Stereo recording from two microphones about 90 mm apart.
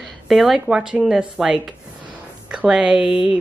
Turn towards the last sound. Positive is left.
turn(degrees=-10)  # may be behind; listen again after turning